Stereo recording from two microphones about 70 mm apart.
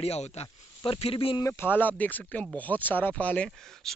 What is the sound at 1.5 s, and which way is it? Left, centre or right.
Speech, left.